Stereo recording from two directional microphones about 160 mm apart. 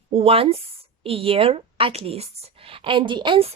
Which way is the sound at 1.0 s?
35° right (ahead or behind).